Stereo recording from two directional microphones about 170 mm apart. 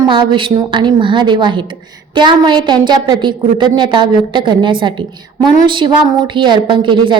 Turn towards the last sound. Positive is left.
turn(degrees=-30)  # may be behind; listen again after turning